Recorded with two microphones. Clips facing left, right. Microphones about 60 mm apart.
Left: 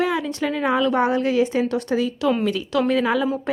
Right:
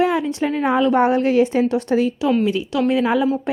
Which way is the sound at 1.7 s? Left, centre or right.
Right.